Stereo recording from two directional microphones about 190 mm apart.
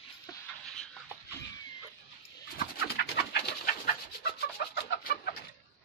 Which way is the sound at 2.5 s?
55° left (ahead or behind).